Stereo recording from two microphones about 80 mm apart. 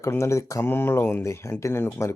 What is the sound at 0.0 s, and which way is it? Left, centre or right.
Speech, left.